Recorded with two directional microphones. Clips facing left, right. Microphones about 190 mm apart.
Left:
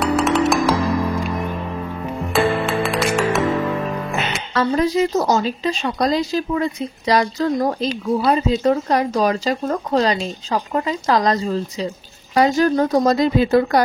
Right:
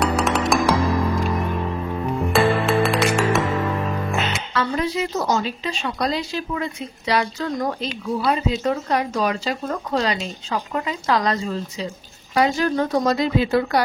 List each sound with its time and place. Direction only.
0.0 s music: centre (ahead or behind)
2.3 s music: centre (ahead or behind)
4.6 s a woman's voice: 40° left (ahead or behind)